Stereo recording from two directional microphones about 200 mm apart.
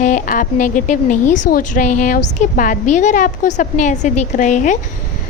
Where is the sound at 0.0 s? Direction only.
40° left (ahead or behind).